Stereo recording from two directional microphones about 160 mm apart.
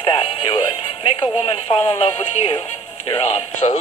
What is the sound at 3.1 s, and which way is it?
Speech, 35° left (ahead or behind).